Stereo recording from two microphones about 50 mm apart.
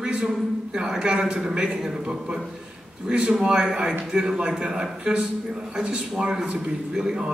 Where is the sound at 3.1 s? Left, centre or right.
Right.